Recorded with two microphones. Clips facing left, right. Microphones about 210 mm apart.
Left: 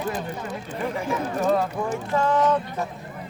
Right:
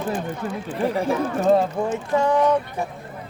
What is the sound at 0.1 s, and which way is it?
Speech, 40° left (ahead or behind).